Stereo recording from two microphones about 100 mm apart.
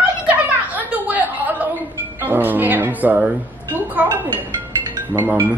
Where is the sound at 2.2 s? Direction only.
20° right (ahead or behind).